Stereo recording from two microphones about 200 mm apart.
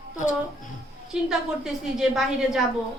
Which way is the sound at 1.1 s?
5° right (ahead or behind).